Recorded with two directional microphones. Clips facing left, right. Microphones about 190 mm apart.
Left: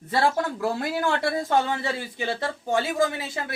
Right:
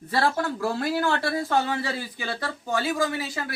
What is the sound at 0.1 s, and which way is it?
Speech, 20° left (ahead or behind).